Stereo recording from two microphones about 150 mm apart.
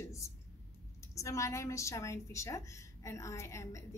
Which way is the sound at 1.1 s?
20° left (ahead or behind).